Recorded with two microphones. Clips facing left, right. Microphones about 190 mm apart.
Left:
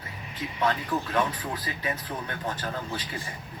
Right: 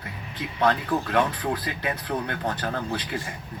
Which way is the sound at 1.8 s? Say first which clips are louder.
Right 4 dB; 65° right (ahead or behind).